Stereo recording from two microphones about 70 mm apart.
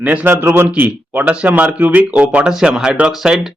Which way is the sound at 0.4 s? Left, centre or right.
Right.